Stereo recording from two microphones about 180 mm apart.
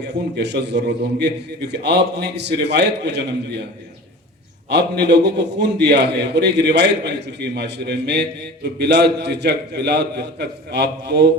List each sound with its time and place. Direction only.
0.0 s a man's voice: 70° right (ahead or behind)
4.7 s a man's voice: 70° right (ahead or behind)